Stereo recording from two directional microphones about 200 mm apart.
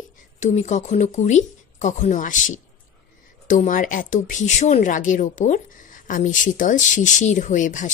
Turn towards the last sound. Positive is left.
turn(degrees=40)  # may be behind; listen again after turning